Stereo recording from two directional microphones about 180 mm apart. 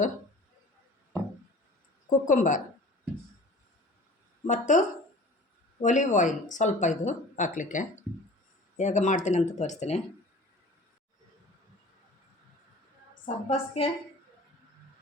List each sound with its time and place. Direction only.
2.0 s speech: 45° left (ahead or behind)
4.4 s speech: 45° left (ahead or behind)
13.2 s speech: 35° left (ahead or behind)